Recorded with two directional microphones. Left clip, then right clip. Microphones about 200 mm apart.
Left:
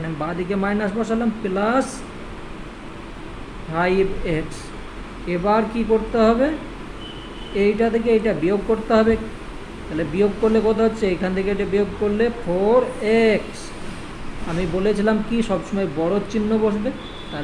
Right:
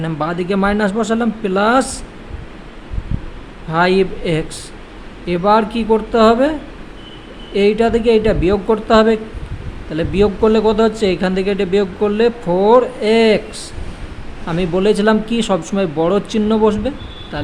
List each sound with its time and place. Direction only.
0.2 s speech: 50° right (ahead or behind)
3.7 s speech: 50° right (ahead or behind)
7.5 s speech: 45° right (ahead or behind)
14.8 s speech: 45° right (ahead or behind)